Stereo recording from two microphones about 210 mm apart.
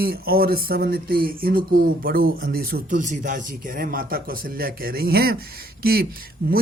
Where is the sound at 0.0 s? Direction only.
45° right (ahead or behind).